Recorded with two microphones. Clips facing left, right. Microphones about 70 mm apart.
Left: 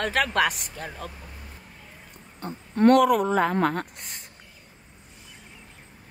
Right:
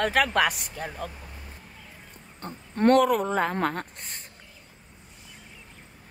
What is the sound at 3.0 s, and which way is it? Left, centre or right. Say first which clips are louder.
Speech: left 3 dB; left.